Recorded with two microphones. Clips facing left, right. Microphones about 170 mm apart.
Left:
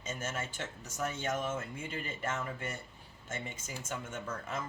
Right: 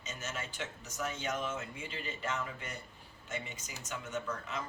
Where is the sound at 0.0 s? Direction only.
50° left (ahead or behind).